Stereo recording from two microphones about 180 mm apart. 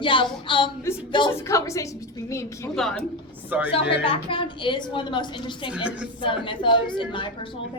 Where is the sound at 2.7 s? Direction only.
Centre (ahead or behind).